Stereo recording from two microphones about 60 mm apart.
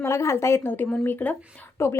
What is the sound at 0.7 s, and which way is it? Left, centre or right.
Speech, left.